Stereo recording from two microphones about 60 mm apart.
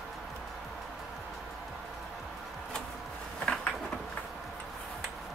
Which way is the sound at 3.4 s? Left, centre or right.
Centre.